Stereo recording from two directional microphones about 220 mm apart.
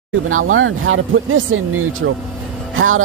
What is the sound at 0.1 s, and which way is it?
Speech, 70° right (ahead or behind).